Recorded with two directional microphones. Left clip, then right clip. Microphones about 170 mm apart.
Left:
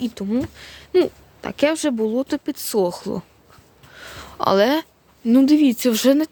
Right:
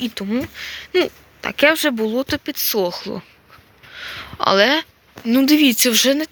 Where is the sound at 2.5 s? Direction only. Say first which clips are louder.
Left 1 dB; 40° left (ahead or behind).